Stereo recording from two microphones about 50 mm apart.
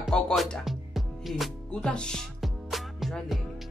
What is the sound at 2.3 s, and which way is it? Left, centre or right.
Music, centre.